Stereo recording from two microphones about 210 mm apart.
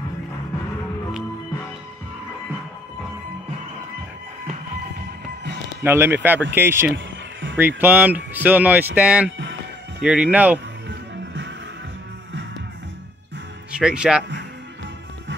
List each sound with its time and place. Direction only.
5.4 s music: 55° right (ahead or behind)
5.9 s speech: 10° right (ahead or behind)
10.9 s music: 60° right (ahead or behind)
13.7 s speech: 5° right (ahead or behind)